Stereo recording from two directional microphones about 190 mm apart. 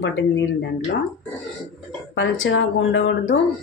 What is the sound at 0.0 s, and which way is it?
Speech, 80° left.